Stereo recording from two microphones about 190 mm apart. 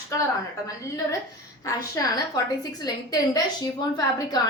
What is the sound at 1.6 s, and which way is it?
A woman's voice, 20° left (ahead or behind).